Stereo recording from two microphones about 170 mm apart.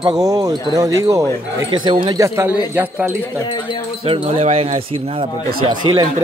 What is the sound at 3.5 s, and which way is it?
Wind chime, 30° left (ahead or behind).